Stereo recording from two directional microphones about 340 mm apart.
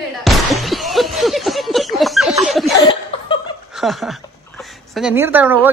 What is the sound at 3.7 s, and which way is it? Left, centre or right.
A woman's voice, centre.